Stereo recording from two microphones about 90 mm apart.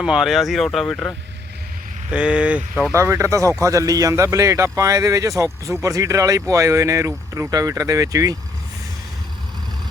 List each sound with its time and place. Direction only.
0.0 s speech: 10° right (ahead or behind); by 1.1 s 10° left (ahead or behind)
2.0 s speech: 10° right (ahead or behind)
2.9 s speech: 35° right (ahead or behind)